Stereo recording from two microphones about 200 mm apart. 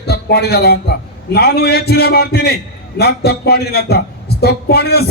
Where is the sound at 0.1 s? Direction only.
55° left (ahead or behind).